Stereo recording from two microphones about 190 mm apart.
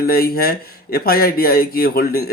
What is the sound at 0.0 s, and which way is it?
Speech, 55° left (ahead or behind).